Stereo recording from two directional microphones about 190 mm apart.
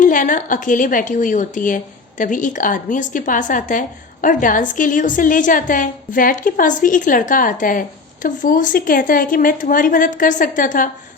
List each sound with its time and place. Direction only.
0.0 s a woman's voice: 45° left (ahead or behind)